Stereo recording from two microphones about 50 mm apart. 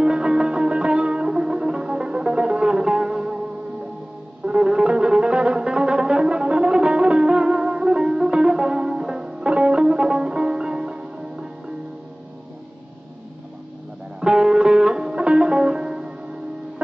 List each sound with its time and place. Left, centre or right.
0.0 s music: centre
4.5 s music: centre
14.2 s music: centre